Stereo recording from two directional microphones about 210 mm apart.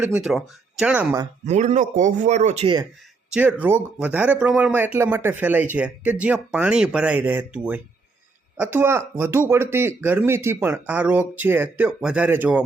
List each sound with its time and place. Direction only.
0.0 s speech: 5° right (ahead or behind)
1.5 s speech: 35° right (ahead or behind)
3.2 s speech: 5° right (ahead or behind)